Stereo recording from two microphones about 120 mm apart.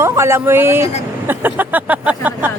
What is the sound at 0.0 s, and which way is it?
Speech, 20° right (ahead or behind).